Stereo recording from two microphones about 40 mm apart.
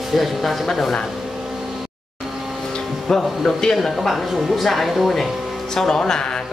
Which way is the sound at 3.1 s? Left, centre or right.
Centre.